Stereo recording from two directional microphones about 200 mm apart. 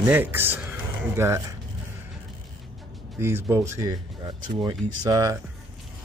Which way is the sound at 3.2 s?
10° right (ahead or behind).